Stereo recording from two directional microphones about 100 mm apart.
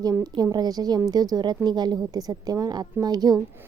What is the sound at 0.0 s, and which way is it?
A woman's voice, 40° right (ahead or behind).